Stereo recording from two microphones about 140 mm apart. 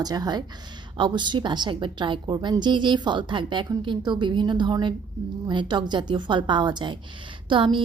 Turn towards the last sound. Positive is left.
turn(degrees=-35)  # may be behind; listen again after turning